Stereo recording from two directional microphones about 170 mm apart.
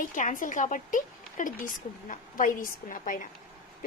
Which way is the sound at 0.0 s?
50° left (ahead or behind).